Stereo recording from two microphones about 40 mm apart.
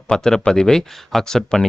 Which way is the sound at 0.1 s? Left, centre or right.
Centre.